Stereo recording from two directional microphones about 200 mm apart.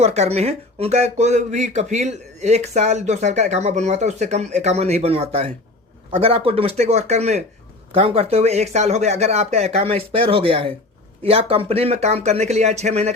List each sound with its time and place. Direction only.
0.0 s a man's voice: 30° right (ahead or behind)